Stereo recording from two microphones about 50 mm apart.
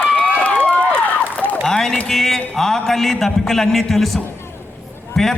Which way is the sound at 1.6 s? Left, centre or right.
Centre.